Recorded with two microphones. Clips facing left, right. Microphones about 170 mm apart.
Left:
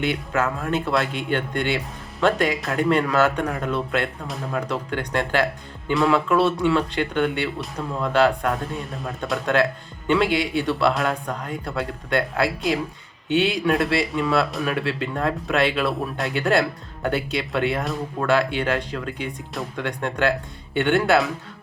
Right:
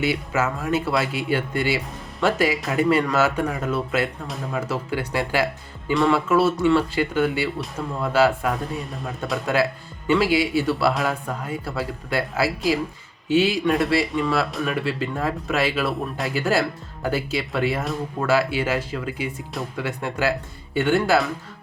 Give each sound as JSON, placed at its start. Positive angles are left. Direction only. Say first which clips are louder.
{"t": 0.0, "sound": "speech", "louder": "even", "side_deg": -5}